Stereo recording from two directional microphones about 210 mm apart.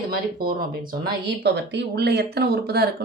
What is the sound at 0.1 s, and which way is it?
Speech, 45° right (ahead or behind).